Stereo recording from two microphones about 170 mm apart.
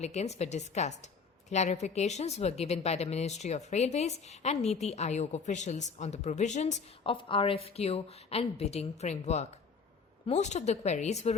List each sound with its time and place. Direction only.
0.0 s a woman's voice: 40° left (ahead or behind)
7.0 s a woman's voice: 30° left (ahead or behind)